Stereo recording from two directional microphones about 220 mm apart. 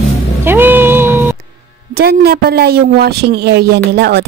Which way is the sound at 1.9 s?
45° right (ahead or behind).